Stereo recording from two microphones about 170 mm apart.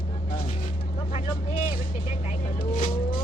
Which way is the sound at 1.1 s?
45° left (ahead or behind).